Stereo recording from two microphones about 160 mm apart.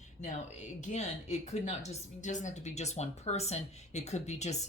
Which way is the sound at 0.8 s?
45° left (ahead or behind).